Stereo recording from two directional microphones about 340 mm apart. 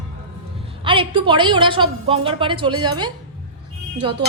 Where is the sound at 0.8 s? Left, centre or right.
Centre.